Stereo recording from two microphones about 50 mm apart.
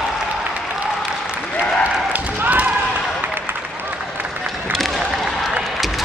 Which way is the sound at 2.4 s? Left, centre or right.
Right.